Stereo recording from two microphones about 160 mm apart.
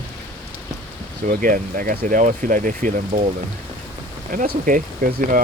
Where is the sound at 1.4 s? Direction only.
60° right (ahead or behind).